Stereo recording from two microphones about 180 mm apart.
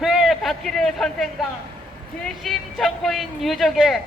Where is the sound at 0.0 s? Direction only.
5° right (ahead or behind).